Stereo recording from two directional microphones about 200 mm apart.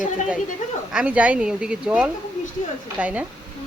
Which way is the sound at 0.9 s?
5° right (ahead or behind).